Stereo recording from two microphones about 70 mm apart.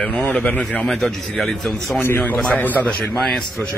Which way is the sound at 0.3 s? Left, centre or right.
Left.